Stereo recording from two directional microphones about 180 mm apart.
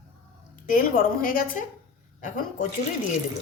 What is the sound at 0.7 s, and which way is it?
A woman's voice, 50° left (ahead or behind).